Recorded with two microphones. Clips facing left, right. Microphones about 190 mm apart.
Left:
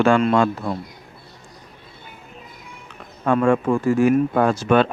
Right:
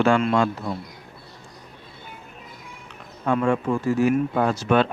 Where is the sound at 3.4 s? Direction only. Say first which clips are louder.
Left 5 dB; 90° left.